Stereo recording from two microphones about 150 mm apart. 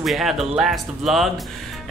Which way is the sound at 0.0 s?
Centre (ahead or behind).